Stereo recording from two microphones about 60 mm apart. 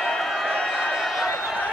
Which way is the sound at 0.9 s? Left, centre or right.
Centre.